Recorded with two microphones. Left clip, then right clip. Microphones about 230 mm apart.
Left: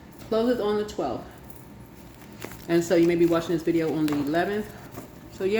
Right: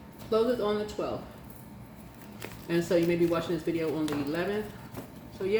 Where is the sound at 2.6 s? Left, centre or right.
Left.